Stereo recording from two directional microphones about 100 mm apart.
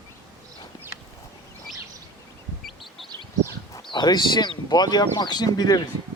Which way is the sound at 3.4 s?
45° left (ahead or behind).